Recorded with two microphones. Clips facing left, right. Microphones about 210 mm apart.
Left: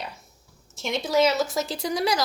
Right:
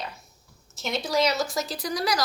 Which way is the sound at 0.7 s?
5° right (ahead or behind).